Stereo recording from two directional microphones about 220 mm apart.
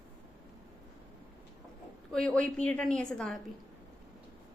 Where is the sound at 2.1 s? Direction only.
5° left (ahead or behind).